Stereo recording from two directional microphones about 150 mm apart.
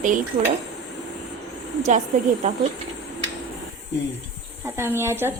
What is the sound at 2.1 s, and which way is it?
Speech, 55° right (ahead or behind).